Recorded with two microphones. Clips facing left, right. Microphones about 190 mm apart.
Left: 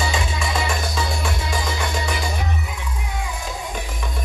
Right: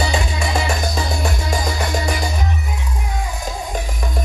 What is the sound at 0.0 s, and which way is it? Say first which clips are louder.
Music: right 3 dB; 40° right (ahead or behind).